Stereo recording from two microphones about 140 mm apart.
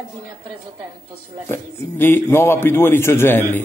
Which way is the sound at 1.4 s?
15° left (ahead or behind).